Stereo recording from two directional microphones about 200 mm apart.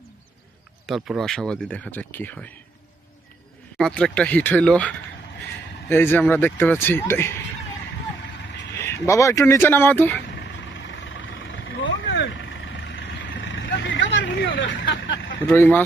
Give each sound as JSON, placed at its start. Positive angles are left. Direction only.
{"t": 0.9, "sound": "speech", "side_deg": 0}
{"t": 3.8, "sound": "speech", "side_deg": 5}
{"t": 8.7, "sound": "speech", "side_deg": 15}
{"t": 10.4, "sound": "vehicle", "side_deg": 65}
{"t": 15.4, "sound": "speech", "side_deg": 10}